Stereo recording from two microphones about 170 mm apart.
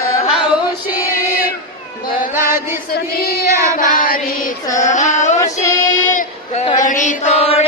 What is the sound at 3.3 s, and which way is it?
Child singing, 20° right (ahead or behind).